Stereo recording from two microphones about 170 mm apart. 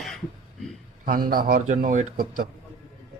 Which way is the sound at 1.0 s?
55° right (ahead or behind).